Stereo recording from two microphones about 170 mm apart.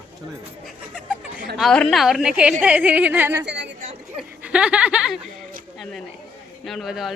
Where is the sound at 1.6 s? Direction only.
5° left (ahead or behind); by 3.5 s 15° right (ahead or behind).